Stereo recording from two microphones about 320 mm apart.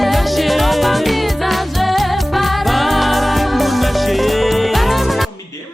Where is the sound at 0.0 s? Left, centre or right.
Centre.